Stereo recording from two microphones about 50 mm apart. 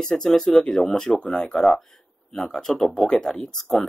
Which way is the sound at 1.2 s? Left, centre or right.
Centre.